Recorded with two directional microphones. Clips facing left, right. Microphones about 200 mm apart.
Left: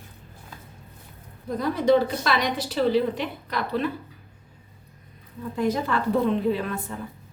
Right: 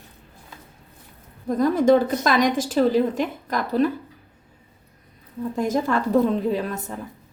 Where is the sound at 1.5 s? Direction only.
45° right (ahead or behind).